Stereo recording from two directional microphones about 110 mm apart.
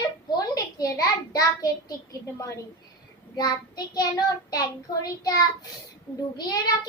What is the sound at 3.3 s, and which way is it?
Speech, 40° left (ahead or behind).